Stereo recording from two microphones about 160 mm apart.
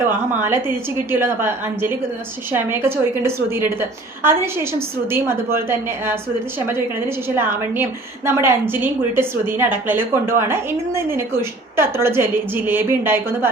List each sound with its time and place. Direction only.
0.4 s a woman's voice: 15° right (ahead or behind)
7.3 s a woman's voice: 15° right (ahead or behind)